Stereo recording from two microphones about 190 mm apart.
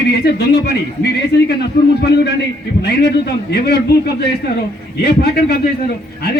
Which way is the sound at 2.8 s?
60° left (ahead or behind).